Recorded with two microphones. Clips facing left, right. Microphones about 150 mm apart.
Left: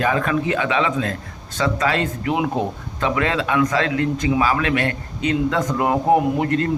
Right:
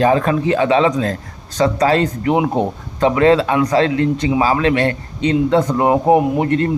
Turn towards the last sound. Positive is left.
turn(degrees=-25)  # may be behind; listen again after turning